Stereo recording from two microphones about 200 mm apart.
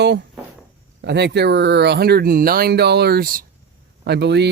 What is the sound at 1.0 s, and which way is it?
Speech, 55° right (ahead or behind).